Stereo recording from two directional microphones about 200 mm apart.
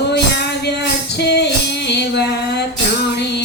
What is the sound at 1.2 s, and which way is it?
Music, 55° left (ahead or behind).